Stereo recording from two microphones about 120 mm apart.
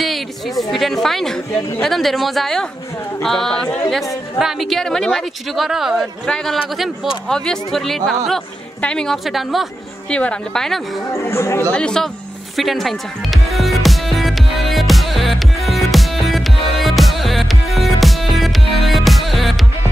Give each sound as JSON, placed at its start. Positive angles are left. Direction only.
{"t": 0.0, "sound": "speech", "side_deg": 0}
{"t": 4.4, "sound": "speech", "side_deg": 0}
{"t": 11.1, "sound": "speech", "side_deg": 25}
{"t": 11.7, "sound": "speech", "side_deg": 5}
{"t": 12.5, "sound": "music", "side_deg": 0}